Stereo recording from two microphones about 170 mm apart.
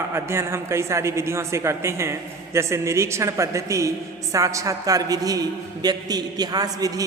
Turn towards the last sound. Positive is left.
turn(degrees=-20)  # may be behind; listen again after turning